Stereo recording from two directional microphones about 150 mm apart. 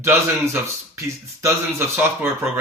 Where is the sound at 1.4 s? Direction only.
15° right (ahead or behind).